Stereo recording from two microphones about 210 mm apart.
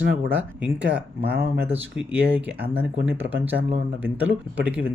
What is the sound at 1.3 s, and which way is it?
Speech, 50° right (ahead or behind).